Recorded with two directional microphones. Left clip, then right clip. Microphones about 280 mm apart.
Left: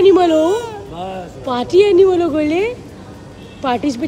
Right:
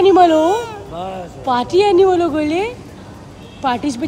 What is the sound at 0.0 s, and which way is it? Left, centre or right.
Speech, centre.